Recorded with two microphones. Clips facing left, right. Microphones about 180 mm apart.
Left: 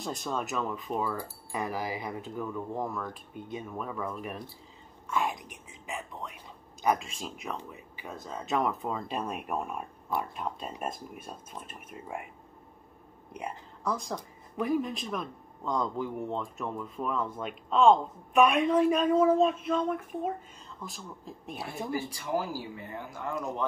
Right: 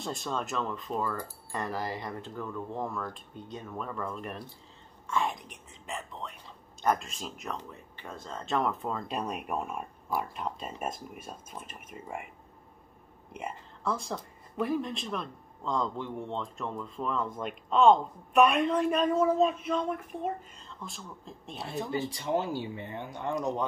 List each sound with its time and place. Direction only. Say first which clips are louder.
0.0 s speech: left 1 dB; 5° left (ahead or behind)
13.3 s a woman's voice: even; centre (ahead or behind)
21.9 s speech: right 2 dB; 25° right (ahead or behind)